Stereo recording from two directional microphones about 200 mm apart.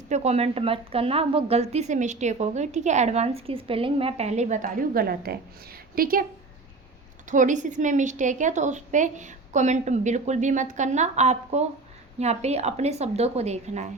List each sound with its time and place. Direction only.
0.1 s a woman's voice: 35° right (ahead or behind)
7.3 s a woman's voice: 40° right (ahead or behind)